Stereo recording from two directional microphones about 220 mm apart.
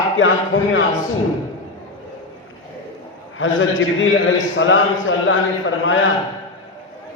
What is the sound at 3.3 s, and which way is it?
A man's voice, 60° left (ahead or behind).